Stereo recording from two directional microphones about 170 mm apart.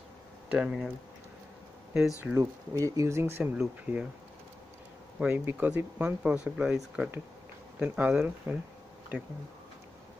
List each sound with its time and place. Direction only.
0.5 s speech: 5° right (ahead or behind)
2.0 s speech: 5° right (ahead or behind)
2.3 s speech: 20° right (ahead or behind)
5.2 s speech: 15° right (ahead or behind)